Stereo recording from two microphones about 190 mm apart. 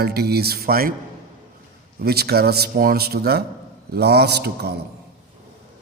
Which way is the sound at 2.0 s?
55° right (ahead or behind).